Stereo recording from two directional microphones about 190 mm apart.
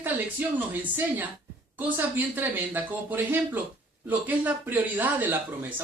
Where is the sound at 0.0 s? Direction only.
10° right (ahead or behind).